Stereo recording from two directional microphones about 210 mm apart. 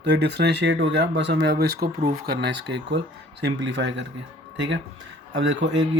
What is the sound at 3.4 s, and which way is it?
Speech, 60° right (ahead or behind).